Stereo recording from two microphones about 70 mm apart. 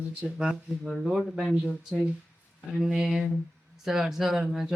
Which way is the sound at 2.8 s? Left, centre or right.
Centre.